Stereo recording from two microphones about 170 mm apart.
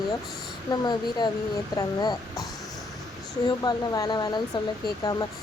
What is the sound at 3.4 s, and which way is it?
Speech, 25° left (ahead or behind).